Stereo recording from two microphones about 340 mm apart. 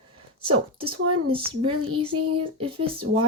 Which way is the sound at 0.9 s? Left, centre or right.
Right.